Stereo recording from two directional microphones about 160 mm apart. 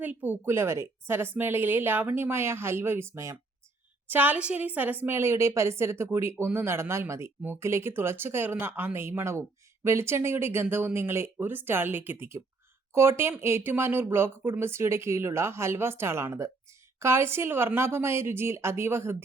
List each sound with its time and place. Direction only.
0.0 s a woman's voice: 10° right (ahead or behind)